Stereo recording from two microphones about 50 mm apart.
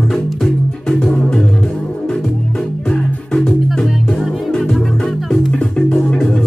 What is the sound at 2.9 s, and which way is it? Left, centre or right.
Music, centre.